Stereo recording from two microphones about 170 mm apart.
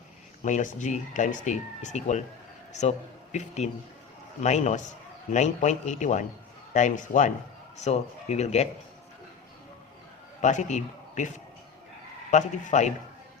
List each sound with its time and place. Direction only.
0.4 s speech: 45° left (ahead or behind)
3.3 s speech: 40° left (ahead or behind)
10.4 s a man's voice: 45° left (ahead or behind)
12.3 s speech: 45° left (ahead or behind)